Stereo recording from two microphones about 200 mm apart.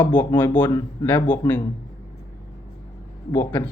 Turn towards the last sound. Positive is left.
turn(degrees=10)  # may be behind; listen again after turning